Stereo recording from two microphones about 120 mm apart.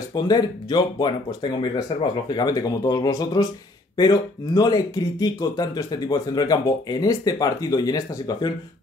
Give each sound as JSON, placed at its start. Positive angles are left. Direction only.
{"t": 0.1, "sound": "speech", "side_deg": 35}